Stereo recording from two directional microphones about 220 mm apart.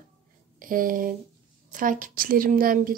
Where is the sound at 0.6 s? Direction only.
40° right (ahead or behind).